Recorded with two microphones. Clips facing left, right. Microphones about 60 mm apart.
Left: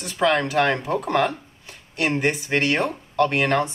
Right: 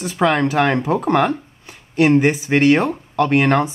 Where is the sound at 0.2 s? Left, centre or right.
Centre.